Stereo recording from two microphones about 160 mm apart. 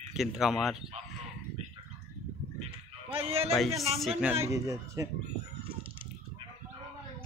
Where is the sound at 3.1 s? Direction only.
40° right (ahead or behind).